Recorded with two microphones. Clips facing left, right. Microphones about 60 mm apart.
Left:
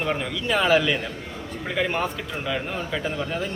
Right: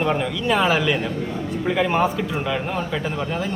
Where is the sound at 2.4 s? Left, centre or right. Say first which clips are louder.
Right 4 dB; centre.